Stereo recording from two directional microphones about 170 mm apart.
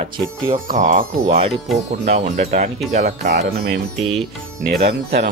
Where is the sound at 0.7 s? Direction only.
50° right (ahead or behind).